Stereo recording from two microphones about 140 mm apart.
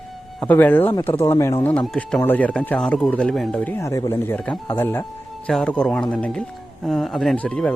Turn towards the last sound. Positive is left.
turn(degrees=10)  # may be behind; listen again after turning